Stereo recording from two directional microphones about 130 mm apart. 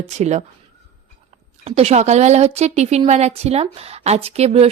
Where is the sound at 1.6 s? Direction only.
55° right (ahead or behind).